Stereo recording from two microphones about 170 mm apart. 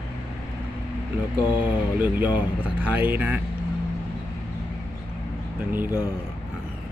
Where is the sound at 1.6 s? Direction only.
10° right (ahead or behind).